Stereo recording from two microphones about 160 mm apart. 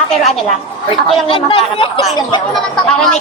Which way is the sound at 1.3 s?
35° left (ahead or behind).